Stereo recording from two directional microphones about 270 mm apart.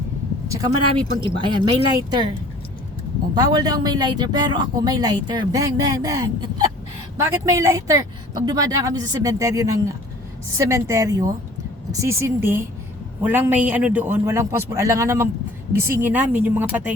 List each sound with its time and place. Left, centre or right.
1.4 s speech: centre
3.3 s speech: centre